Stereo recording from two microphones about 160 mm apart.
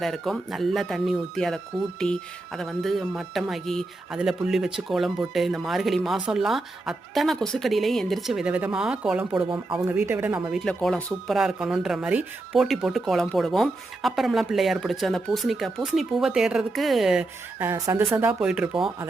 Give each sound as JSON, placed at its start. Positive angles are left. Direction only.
{"t": 0.0, "sound": "speech", "side_deg": 0}
{"t": 9.5, "sound": "speech", "side_deg": -30}
{"t": 9.8, "sound": "speech", "side_deg": -15}
{"t": 17.6, "sound": "speech", "side_deg": -15}